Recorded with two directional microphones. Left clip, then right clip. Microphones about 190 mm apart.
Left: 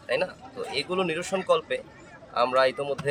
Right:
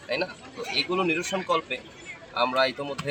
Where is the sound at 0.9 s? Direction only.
20° left (ahead or behind).